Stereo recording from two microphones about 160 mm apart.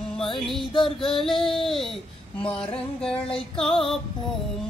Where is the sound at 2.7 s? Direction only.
5° left (ahead or behind).